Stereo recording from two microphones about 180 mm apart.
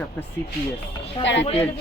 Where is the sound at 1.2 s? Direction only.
85° left.